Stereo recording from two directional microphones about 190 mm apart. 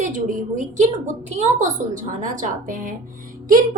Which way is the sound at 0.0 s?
40° right (ahead or behind).